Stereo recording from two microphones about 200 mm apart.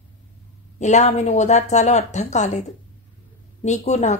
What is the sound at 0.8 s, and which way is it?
Speech, 35° left (ahead or behind).